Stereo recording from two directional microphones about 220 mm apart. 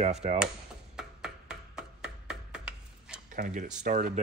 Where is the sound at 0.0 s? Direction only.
30° right (ahead or behind).